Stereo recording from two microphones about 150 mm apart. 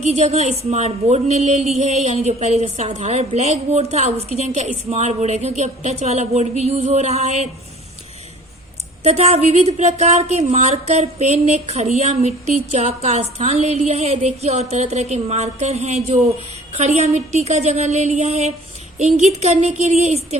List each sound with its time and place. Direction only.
0.0 s speech: 50° right (ahead or behind)
9.0 s speech: 45° right (ahead or behind)